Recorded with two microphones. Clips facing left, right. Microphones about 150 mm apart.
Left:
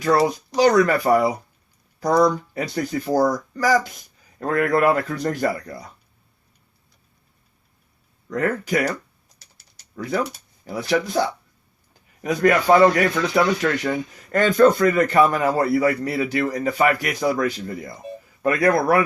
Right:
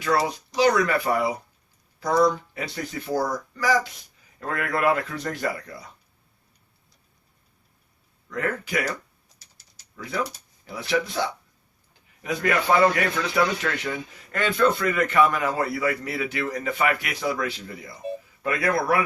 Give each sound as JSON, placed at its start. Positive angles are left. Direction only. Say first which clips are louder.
{"t": 0.0, "sound": "speech", "louder": "left 5 dB", "side_deg": 40}
{"t": 8.3, "sound": "speech", "louder": "left 6 dB", "side_deg": 40}
{"t": 9.4, "sound": "typing", "louder": "left 2 dB", "side_deg": 60}
{"t": 10.7, "sound": "speech", "louder": "left 4 dB", "side_deg": 40}
{"t": 12.2, "sound": "speech", "louder": "left 6 dB", "side_deg": 40}